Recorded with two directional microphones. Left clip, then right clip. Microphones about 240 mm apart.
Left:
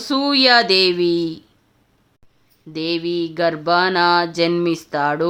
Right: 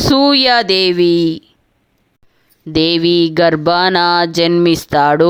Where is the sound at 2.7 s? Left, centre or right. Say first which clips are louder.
Right 10 dB; right.